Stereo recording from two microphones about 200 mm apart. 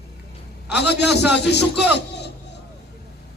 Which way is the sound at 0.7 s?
55° left (ahead or behind).